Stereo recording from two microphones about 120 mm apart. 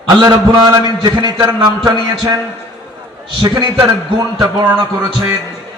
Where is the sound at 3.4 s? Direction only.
40° right (ahead or behind).